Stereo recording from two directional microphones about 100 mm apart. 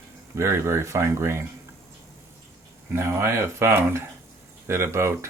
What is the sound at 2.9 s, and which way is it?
Speech, 25° right (ahead or behind).